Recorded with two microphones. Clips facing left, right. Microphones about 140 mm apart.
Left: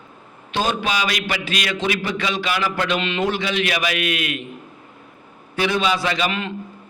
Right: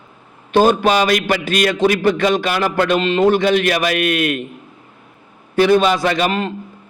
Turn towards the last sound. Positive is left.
turn(degrees=-40)  # may be behind; listen again after turning